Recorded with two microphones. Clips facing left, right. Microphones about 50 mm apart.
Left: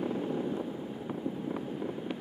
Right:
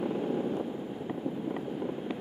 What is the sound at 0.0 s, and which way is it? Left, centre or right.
Vehicle, centre.